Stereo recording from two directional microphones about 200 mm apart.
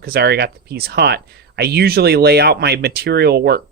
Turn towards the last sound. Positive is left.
turn(degrees=-55)  # may be behind; listen again after turning